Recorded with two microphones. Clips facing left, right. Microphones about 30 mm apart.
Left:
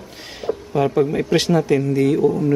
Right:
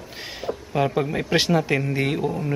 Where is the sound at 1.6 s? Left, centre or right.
Right.